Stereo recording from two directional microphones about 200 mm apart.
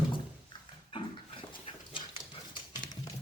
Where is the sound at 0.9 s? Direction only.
25° left (ahead or behind).